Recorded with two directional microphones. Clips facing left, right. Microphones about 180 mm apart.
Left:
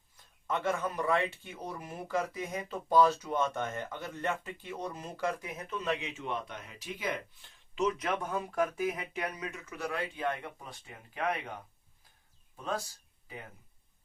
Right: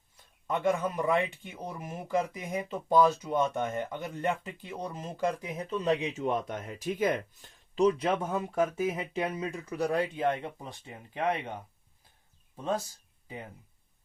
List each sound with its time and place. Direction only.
0.4 s speech: 15° right (ahead or behind)
5.5 s speech: 35° right (ahead or behind)
10.2 s speech: 25° right (ahead or behind)